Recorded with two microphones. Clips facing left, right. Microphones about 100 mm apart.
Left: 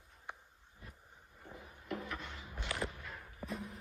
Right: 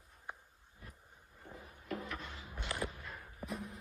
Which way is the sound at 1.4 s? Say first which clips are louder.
Even; 5° left (ahead or behind).